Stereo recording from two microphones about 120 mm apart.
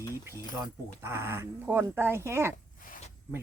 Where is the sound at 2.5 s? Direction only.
70° left (ahead or behind).